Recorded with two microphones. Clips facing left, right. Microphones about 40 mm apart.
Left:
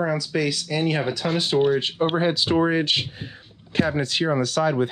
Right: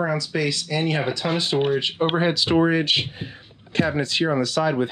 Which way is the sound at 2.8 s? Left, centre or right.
Centre.